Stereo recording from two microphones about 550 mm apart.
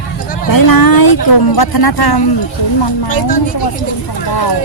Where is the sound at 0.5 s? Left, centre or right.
Left.